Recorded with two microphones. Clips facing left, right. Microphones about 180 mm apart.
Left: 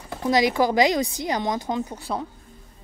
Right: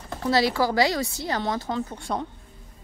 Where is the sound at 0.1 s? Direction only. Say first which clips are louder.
Left 2 dB; 15° left (ahead or behind).